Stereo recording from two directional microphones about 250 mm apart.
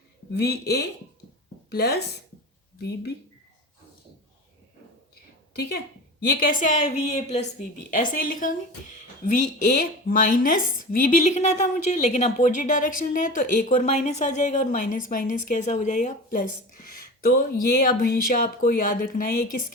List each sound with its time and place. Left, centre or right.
0.3 s speech: left
5.5 s a woman's voice: left